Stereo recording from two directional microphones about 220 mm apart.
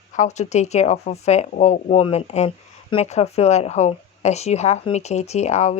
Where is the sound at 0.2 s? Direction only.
30° left (ahead or behind).